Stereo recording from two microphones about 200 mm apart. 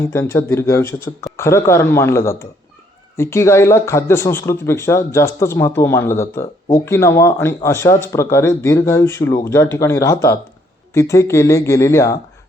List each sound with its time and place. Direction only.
0.0 s speech: 15° left (ahead or behind)